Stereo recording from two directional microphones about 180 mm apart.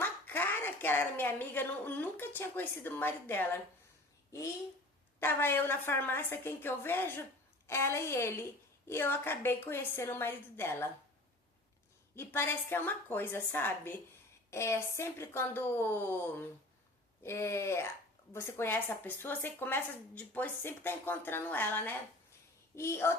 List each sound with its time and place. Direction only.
0.0 s a woman's voice: 10° left (ahead or behind)
12.1 s speech: 15° left (ahead or behind)